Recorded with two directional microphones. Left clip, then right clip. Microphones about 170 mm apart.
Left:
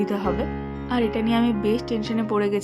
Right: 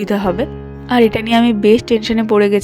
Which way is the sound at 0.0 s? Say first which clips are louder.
Right 8 dB; 40° right (ahead or behind).